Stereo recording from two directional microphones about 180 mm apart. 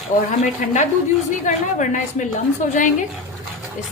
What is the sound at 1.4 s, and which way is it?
A woman's voice, 45° left (ahead or behind).